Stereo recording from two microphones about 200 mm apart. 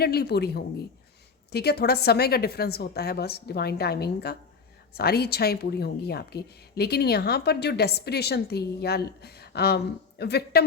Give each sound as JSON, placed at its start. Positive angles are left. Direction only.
{"t": 0.0, "sound": "a woman's voice", "side_deg": 55}